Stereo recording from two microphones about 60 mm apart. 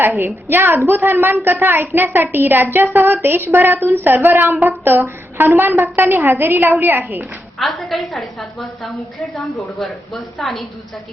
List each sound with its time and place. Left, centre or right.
0.0 s a woman's voice: right
7.6 s a woman's voice: centre